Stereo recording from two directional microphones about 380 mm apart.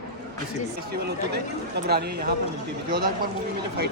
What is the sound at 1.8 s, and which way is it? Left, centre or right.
Speech, right.